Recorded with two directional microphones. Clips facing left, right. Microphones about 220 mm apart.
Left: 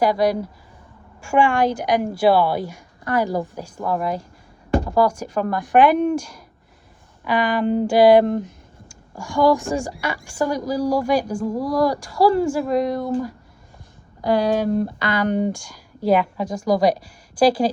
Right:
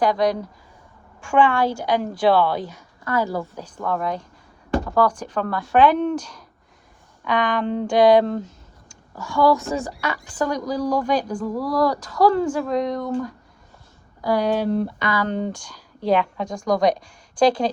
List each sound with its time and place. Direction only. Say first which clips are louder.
0.0 s a woman's voice: left 1 dB; 10° left (ahead or behind)
14.2 s speech: left 2 dB; 20° left (ahead or behind)
14.4 s speech: left 1 dB; 45° left (ahead or behind)
15.1 s a woman's voice: left 6 dB; 15° left (ahead or behind)